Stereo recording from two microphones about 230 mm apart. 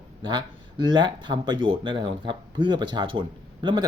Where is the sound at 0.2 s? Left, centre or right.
Centre.